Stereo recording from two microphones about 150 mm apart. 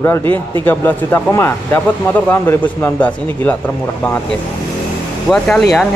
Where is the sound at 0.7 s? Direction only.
15° left (ahead or behind).